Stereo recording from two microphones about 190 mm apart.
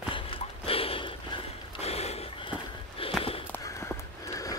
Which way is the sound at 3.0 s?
30° left (ahead or behind).